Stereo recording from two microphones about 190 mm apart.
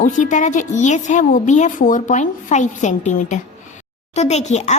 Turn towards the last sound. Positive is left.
turn(degrees=35)  # may be behind; listen again after turning